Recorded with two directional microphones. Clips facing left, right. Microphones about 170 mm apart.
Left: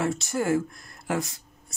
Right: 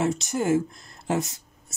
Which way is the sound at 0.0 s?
20° right (ahead or behind).